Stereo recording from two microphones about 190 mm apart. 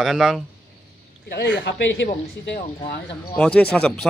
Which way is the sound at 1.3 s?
65° left (ahead or behind).